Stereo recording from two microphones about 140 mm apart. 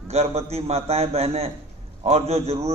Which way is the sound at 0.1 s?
50° right (ahead or behind).